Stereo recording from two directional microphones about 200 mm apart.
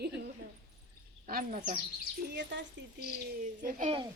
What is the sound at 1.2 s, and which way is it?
Speech, 45° right (ahead or behind).